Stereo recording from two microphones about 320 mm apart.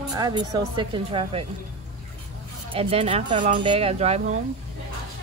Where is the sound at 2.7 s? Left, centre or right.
Centre.